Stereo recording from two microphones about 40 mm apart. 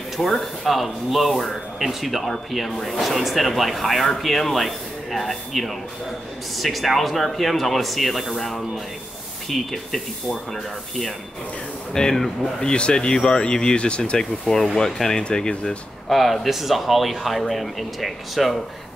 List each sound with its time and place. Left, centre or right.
0.2 s speech: centre; by 14.2 s left
14.4 s speech: centre
16.1 s speech: centre